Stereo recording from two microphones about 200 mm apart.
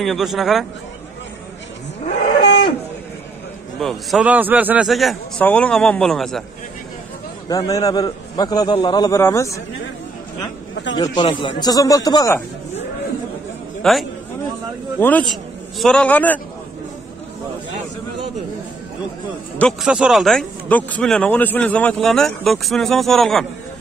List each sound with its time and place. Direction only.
0.0 s speech: centre (ahead or behind)
3.8 s speech: centre (ahead or behind)
7.4 s a man's voice: 15° left (ahead or behind)
11.0 s a man's voice: 25° left (ahead or behind)
13.8 s a man's voice: 5° left (ahead or behind)
19.6 s speech: centre (ahead or behind)